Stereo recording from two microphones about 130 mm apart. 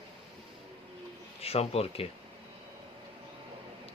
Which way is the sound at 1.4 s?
50° left (ahead or behind).